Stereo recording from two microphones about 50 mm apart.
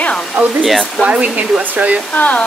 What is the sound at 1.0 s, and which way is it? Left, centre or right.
Speech, right.